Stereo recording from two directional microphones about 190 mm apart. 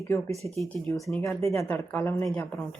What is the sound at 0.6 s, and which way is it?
Speech, centre (ahead or behind).